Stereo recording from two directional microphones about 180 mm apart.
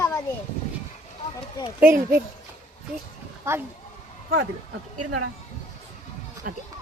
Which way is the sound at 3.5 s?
15° right (ahead or behind).